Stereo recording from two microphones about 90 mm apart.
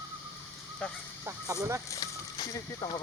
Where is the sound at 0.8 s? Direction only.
10° left (ahead or behind).